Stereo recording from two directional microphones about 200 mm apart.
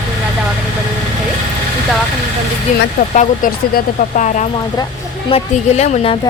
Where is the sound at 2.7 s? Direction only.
40° left (ahead or behind).